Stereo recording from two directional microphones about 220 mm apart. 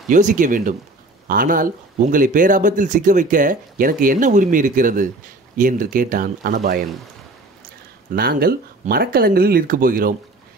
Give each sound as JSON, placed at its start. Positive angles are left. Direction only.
{"t": 0.1, "sound": "speech", "side_deg": -35}
{"t": 8.1, "sound": "speech", "side_deg": -45}